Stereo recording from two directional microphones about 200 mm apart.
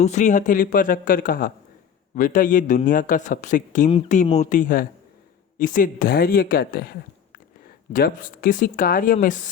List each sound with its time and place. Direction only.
0.0 s a man's voice: 35° left (ahead or behind)
7.9 s a man's voice: 45° left (ahead or behind)